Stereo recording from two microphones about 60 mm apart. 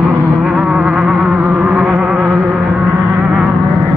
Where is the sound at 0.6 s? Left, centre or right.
Centre.